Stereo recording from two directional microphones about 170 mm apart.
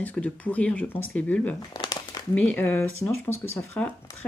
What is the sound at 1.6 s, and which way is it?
Crumpling, 25° left (ahead or behind).